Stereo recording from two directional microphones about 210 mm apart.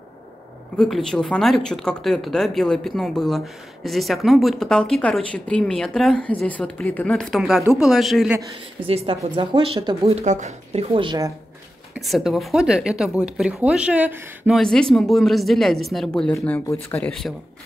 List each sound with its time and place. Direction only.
0.7 s speech: centre (ahead or behind)
8.4 s speech: 25° right (ahead or behind)
11.9 s speech: centre (ahead or behind)
14.6 s speech: 5° left (ahead or behind)